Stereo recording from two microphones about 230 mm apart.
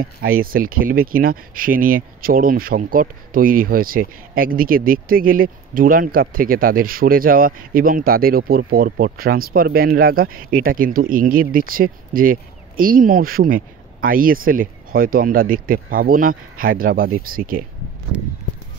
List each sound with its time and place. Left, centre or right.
0.0 s speech: right
18.1 s speech: centre